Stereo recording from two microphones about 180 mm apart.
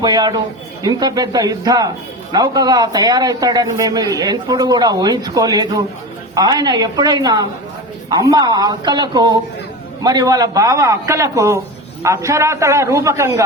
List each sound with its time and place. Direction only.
0.0 s a man's voice: 20° right (ahead or behind)